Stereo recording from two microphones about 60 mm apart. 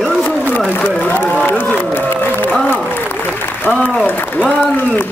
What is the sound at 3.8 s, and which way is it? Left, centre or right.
Applause, centre.